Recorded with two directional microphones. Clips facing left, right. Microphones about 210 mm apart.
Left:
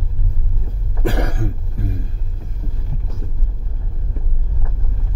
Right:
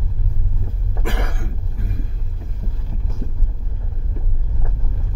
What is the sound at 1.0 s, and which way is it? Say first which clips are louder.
Cough: left 6 dB; 35° left (ahead or behind).